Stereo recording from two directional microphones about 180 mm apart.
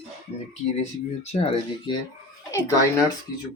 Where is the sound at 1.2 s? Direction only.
35° left (ahead or behind).